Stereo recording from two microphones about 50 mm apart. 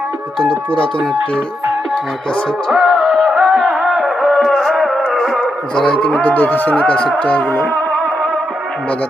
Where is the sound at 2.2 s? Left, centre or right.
Left.